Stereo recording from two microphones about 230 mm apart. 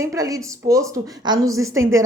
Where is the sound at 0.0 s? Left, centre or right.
Centre.